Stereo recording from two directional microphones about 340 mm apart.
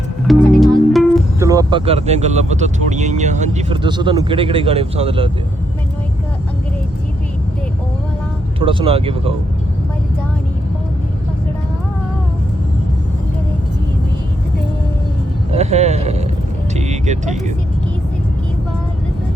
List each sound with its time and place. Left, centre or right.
0.3 s speech: centre
8.5 s speech: centre
15.5 s speech: centre
16.7 s vehicle: centre